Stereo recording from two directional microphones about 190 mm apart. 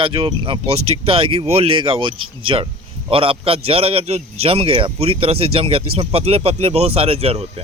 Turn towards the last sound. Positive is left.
turn(degrees=-30)  # may be behind; listen again after turning